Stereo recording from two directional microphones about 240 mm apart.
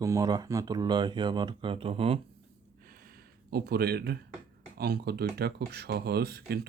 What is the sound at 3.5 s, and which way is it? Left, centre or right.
Speech, right.